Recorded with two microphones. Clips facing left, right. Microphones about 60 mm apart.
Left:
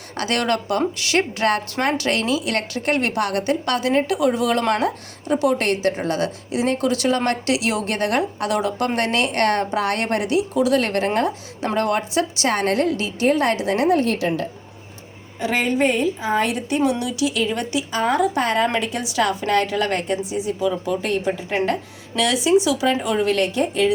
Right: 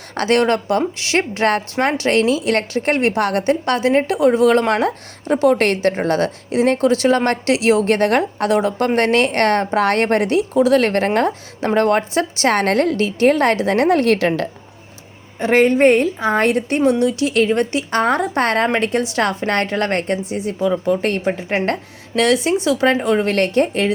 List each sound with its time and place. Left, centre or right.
0.1 s a woman's voice: right
14.0 s a woman's voice: right
15.4 s a woman's voice: right
17.0 s a woman's voice: right
17.2 s a woman's voice: right
20.6 s speech: right
21.0 s a woman's voice: right
23.0 s a woman's voice: right
23.3 s a woman's voice: right